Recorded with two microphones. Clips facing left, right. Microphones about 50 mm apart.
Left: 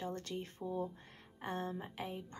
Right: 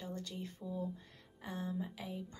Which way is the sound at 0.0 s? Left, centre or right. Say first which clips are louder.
Left 3 dB; left.